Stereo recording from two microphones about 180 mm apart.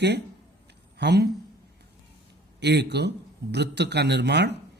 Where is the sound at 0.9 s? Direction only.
65° right (ahead or behind).